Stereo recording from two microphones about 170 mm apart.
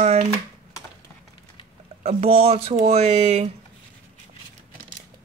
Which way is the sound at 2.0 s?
35° right (ahead or behind).